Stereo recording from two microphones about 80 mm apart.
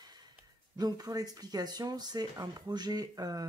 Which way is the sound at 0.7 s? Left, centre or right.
Right.